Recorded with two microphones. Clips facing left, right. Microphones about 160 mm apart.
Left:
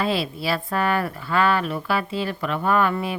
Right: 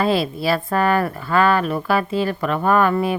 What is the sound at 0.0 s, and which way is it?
Speech, 45° right (ahead or behind).